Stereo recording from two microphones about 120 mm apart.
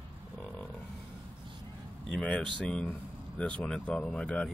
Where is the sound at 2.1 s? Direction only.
5° left (ahead or behind).